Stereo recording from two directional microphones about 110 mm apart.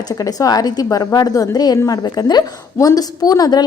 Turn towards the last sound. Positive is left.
turn(degrees=35)  # may be behind; listen again after turning